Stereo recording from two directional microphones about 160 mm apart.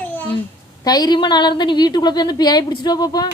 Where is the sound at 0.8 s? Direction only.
25° left (ahead or behind).